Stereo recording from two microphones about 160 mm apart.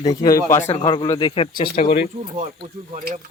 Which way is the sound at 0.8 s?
30° left (ahead or behind).